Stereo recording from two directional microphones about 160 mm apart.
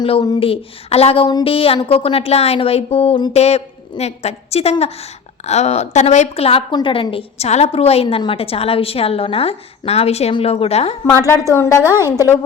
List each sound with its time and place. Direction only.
0.0 s a woman's voice: 30° left (ahead or behind)
11.3 s a woman's voice: 20° left (ahead or behind)
11.9 s a woman's voice: 15° right (ahead or behind)
12.1 s a woman's voice: 20° left (ahead or behind)